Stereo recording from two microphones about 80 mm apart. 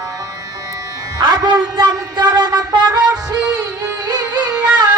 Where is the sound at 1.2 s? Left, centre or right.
Right.